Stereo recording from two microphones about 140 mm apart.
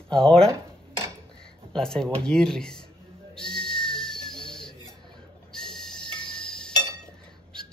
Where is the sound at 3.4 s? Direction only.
5° left (ahead or behind).